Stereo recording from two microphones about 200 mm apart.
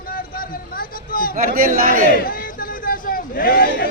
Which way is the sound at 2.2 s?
45° left (ahead or behind).